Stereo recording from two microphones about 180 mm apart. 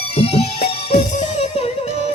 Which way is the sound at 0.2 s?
35° left (ahead or behind).